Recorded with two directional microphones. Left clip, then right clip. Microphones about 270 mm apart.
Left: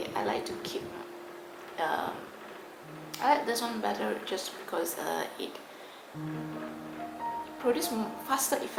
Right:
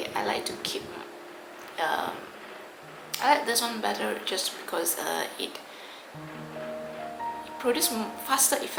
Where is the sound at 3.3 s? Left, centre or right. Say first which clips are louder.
Right 3 dB; centre.